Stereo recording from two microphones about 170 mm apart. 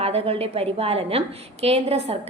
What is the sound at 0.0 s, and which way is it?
A woman's voice, 35° right (ahead or behind).